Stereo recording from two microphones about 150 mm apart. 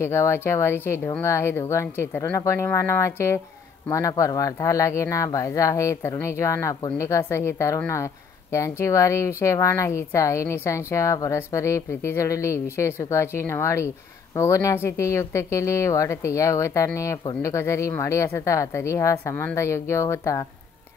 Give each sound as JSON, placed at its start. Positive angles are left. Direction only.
{"t": 0.0, "sound": "speech", "side_deg": 20}